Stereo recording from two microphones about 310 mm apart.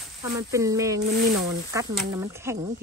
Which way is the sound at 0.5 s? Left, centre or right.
Centre.